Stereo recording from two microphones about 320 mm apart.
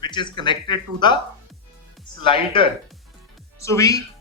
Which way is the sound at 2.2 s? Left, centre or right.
Centre.